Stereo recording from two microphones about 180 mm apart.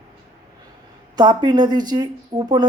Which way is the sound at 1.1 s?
25° right (ahead or behind).